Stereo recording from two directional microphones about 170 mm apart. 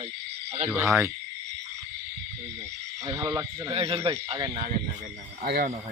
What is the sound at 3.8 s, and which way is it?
Speech, 35° right (ahead or behind).